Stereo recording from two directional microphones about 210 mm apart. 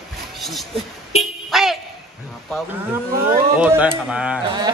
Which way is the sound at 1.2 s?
Centre (ahead or behind).